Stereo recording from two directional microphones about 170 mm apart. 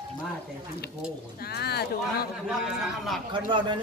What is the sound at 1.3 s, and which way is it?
Speech, 65° left (ahead or behind).